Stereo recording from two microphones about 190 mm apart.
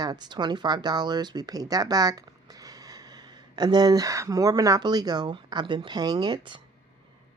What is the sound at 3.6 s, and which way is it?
Speech, 20° right (ahead or behind).